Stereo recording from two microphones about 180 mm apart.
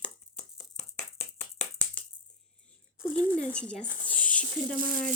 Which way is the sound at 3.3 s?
5° left (ahead or behind).